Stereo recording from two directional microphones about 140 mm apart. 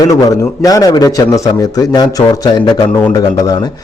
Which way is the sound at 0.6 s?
25° left (ahead or behind).